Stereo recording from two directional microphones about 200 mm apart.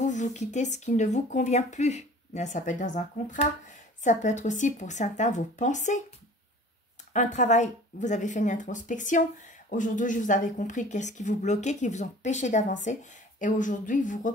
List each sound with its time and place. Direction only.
0.0 s speech: 35° left (ahead or behind)
7.1 s speech: 35° left (ahead or behind)